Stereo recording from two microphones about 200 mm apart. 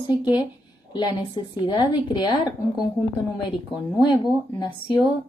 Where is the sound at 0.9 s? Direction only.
20° left (ahead or behind).